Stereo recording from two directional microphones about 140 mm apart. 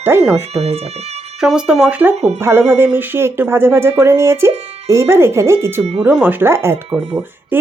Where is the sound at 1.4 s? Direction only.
5° right (ahead or behind).